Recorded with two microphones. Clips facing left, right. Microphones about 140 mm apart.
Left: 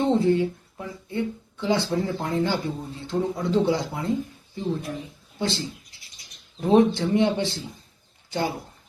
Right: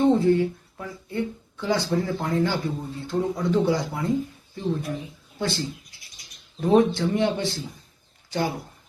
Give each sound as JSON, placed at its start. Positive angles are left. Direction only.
{"t": 0.0, "sound": "a sound", "side_deg": 20}
{"t": 1.9, "sound": "speech", "side_deg": 20}
{"t": 5.4, "sound": "speech", "side_deg": 20}